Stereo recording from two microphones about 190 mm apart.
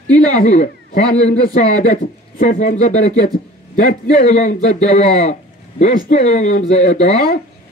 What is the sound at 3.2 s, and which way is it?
Speech, 50° left (ahead or behind).